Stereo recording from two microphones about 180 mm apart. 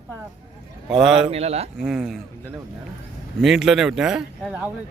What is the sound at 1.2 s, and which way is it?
Speech, 35° right (ahead or behind).